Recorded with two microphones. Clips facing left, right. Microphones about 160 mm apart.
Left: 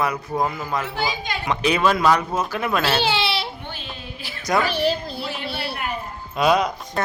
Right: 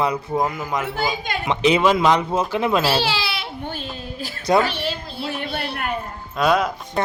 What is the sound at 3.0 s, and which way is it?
Speech, 25° left (ahead or behind).